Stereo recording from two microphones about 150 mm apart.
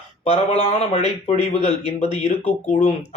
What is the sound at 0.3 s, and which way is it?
A man's voice, 45° left (ahead or behind).